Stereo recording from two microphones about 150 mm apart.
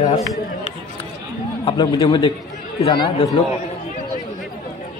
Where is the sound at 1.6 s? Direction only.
30° left (ahead or behind).